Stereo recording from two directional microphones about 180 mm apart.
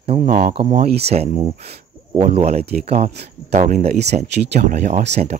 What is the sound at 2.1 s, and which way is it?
Speech, 40° right (ahead or behind).